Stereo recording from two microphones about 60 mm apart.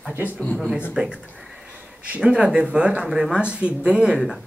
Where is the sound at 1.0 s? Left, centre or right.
Centre.